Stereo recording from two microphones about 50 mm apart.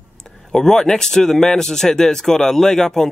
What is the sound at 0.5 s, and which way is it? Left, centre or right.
Speech, centre.